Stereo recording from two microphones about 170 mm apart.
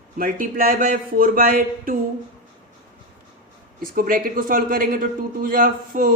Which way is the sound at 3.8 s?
55° right (ahead or behind).